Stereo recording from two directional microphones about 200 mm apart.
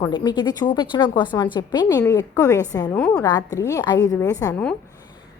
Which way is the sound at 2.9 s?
5° left (ahead or behind).